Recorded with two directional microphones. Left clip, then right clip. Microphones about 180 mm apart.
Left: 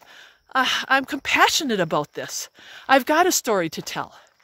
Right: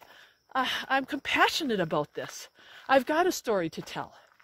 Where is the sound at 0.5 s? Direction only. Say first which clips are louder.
Left 8 dB; 35° left (ahead or behind).